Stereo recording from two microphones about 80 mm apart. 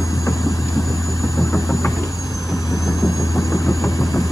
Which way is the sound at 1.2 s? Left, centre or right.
Left.